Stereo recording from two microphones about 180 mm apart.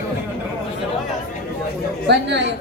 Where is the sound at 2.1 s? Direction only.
70° right (ahead or behind).